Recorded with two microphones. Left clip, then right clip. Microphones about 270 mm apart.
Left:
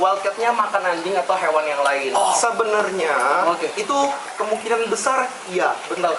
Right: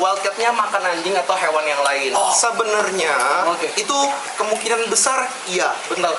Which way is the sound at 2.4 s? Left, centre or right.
Centre.